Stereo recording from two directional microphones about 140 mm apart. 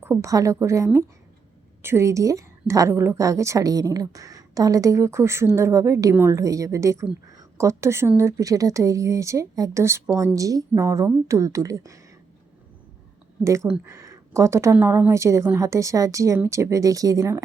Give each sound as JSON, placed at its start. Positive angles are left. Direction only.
{"t": 0.0, "sound": "a woman's voice", "side_deg": -20}
{"t": 13.7, "sound": "a woman's voice", "side_deg": -20}